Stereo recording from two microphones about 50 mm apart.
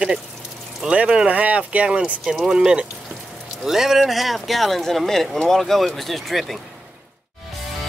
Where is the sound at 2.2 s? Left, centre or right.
Centre.